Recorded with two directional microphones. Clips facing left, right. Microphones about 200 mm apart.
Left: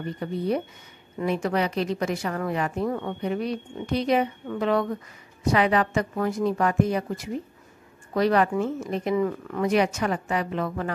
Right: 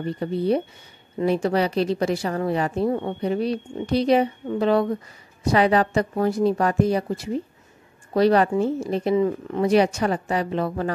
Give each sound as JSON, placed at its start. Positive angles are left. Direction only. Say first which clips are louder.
{"t": 0.0, "sound": "speech", "louder": "right 4 dB", "side_deg": -30}